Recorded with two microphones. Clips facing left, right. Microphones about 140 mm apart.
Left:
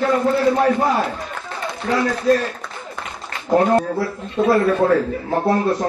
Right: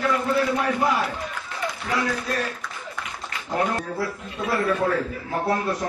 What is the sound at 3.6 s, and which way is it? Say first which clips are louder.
Speech: left 8 dB; 30° left (ahead or behind).